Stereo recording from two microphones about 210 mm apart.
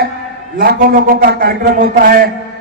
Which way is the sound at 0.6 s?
45° right (ahead or behind).